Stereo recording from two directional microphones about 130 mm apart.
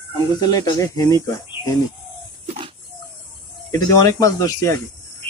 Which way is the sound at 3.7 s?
25° left (ahead or behind).